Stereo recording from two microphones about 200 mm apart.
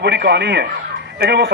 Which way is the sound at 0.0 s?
55° right (ahead or behind).